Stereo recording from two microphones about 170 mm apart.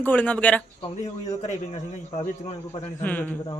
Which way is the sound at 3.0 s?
10° left (ahead or behind).